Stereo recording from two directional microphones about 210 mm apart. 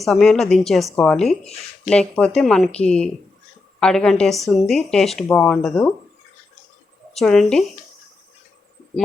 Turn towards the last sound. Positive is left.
turn(degrees=5)  # may be behind; listen again after turning